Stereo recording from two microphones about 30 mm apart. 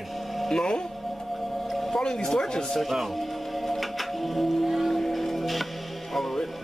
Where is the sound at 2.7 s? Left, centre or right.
Centre.